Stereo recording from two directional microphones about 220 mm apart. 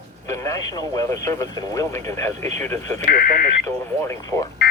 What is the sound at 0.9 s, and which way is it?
Radio, 15° left (ahead or behind).